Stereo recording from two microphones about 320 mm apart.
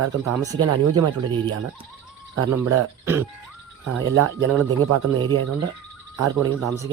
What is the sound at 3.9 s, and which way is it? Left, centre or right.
Speech, right.